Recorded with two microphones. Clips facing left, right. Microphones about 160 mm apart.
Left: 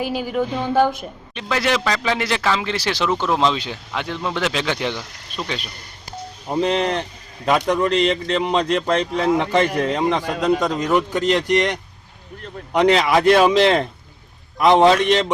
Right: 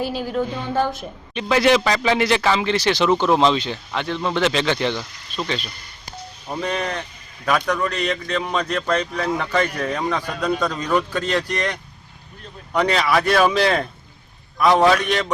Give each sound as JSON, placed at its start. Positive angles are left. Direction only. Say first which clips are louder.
{"t": 0.0, "sound": "a woman's voice", "louder": "left 1 dB", "side_deg": 10}
{"t": 6.5, "sound": "a man's voice", "louder": "left 5 dB", "side_deg": 25}